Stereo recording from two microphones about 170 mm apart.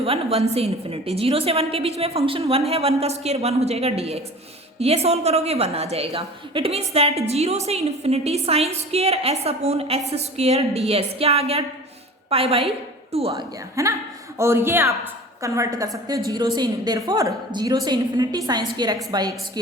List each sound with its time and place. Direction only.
0.0 s a woman's voice: 35° right (ahead or behind)
13.3 s a woman's voice: 20° right (ahead or behind)